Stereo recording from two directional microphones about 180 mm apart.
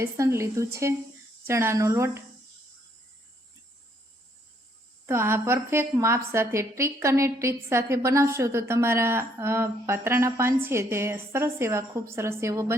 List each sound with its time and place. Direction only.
0.0 s a woman's voice: 15° right (ahead or behind)
5.0 s a woman's voice: 15° right (ahead or behind)